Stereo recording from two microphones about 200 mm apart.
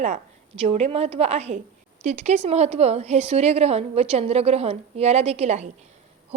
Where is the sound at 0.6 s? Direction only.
30° right (ahead or behind).